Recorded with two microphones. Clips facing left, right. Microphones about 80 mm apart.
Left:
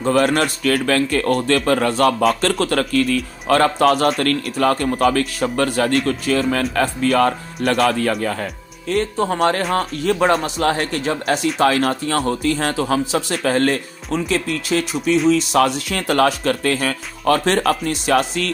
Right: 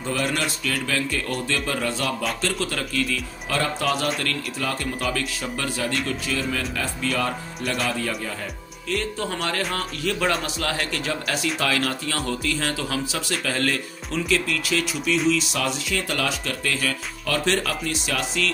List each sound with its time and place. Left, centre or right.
0.0 s speech: left
8.8 s speech: left